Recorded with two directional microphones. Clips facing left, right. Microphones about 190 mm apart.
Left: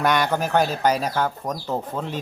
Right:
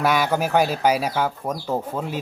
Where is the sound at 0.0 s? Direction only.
5° right (ahead or behind).